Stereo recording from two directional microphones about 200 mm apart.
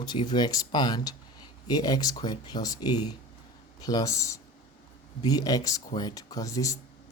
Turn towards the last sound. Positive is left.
turn(degrees=15)  # may be behind; listen again after turning